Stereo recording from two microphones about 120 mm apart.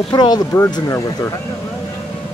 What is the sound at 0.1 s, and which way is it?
Speech, 35° left (ahead or behind).